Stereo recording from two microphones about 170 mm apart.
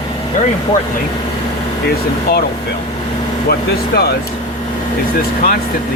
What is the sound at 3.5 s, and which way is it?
Speech, 65° left (ahead or behind).